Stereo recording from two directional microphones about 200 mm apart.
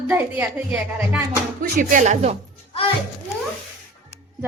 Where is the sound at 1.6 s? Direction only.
40° right (ahead or behind).